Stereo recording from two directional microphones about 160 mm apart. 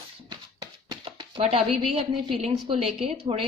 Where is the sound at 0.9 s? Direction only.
30° right (ahead or behind).